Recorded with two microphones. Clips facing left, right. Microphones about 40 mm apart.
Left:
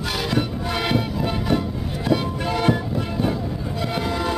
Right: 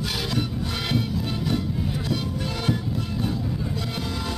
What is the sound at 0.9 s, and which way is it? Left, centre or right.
Music, left.